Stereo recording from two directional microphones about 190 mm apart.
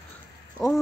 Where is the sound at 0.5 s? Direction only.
Centre (ahead or behind).